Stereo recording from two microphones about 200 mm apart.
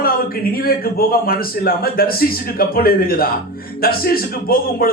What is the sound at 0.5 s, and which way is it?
A man's voice, 50° left (ahead or behind).